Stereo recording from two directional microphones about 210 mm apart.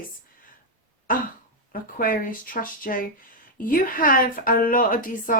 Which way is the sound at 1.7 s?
40° left (ahead or behind).